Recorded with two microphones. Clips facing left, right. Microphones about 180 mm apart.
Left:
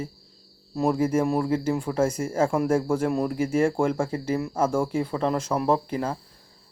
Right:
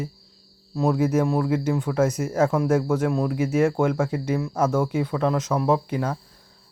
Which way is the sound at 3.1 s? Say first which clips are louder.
Right 1 dB; centre (ahead or behind).